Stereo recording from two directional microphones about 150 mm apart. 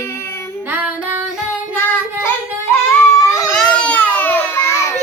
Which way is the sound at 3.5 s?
5° left (ahead or behind).